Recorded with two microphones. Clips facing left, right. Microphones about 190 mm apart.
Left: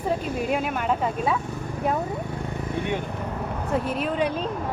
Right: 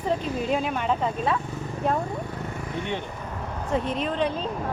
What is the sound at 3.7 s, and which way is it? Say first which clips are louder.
Speech: even; 5° left (ahead or behind).